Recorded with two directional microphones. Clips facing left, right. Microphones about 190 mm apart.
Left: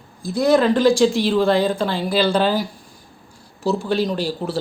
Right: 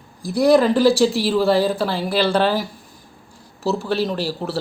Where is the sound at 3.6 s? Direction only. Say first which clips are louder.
Left 1 dB; 5° right (ahead or behind).